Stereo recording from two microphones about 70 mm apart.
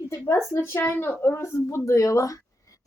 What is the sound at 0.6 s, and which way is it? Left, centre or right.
A woman's voice, left.